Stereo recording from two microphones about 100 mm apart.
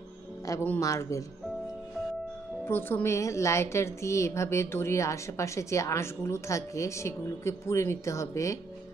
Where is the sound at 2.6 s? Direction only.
20° left (ahead or behind).